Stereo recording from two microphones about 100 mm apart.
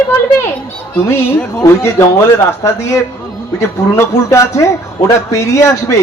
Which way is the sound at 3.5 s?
30° left (ahead or behind).